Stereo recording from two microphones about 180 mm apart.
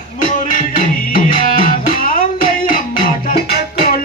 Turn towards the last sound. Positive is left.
turn(degrees=60)  # may be behind; listen again after turning